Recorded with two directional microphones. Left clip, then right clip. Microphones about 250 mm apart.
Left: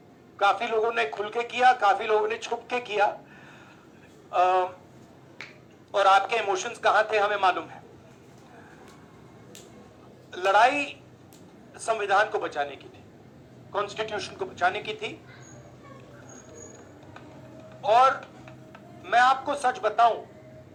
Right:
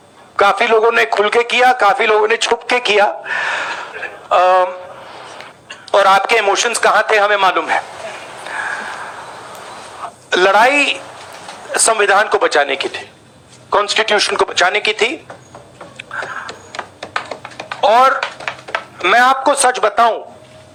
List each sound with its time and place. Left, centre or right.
0.3 s a man's voice: right
5.9 s a man's voice: right
10.2 s a man's voice: right
17.7 s typing: right